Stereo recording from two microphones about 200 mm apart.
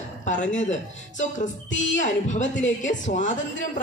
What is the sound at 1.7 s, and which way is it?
Speech, 70° left (ahead or behind).